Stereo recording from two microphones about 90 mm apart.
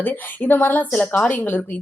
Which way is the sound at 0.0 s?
20° left (ahead or behind).